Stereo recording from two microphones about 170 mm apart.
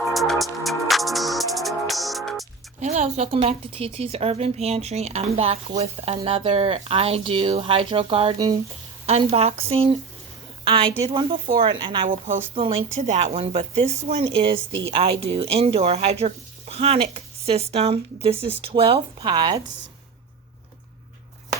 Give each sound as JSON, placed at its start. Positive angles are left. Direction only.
{"t": 0.1, "sound": "music", "side_deg": 0}
{"t": 2.8, "sound": "a woman's voice", "side_deg": -40}
{"t": 10.6, "sound": "a sound", "side_deg": -30}
{"t": 11.1, "sound": "a woman's voice", "side_deg": -30}
{"t": 12.0, "sound": "speech", "side_deg": -50}
{"t": 12.5, "sound": "a woman's voice", "side_deg": -30}